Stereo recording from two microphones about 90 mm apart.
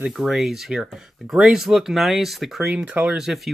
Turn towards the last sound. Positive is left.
turn(degrees=-5)  # may be behind; listen again after turning